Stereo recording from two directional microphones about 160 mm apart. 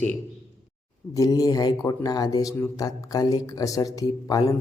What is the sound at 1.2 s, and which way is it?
A man's voice, 20° left (ahead or behind).